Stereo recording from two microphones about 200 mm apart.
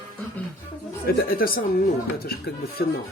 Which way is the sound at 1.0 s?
45° left (ahead or behind).